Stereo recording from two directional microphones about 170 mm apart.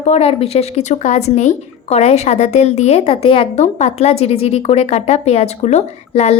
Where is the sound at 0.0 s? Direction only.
40° left (ahead or behind).